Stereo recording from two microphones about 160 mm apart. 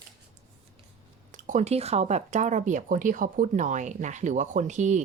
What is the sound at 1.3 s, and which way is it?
Speech, 55° right (ahead or behind).